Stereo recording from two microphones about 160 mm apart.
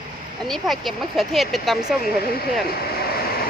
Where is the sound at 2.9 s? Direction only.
75° left (ahead or behind).